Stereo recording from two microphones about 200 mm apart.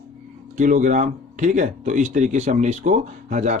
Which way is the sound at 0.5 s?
40° right (ahead or behind).